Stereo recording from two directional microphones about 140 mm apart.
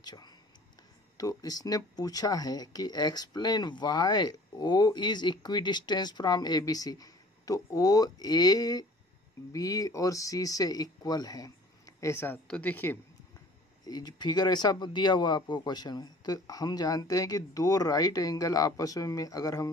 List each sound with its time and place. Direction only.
0.0 s speech: 30° left (ahead or behind); by 13.0 s 15° left (ahead or behind)
13.8 s speech: 30° left (ahead or behind)